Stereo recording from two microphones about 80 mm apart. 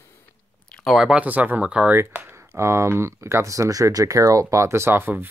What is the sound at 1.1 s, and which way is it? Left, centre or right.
Speech, centre.